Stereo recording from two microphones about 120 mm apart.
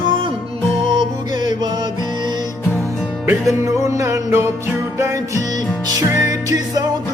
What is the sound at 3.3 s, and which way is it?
Music, 25° right (ahead or behind).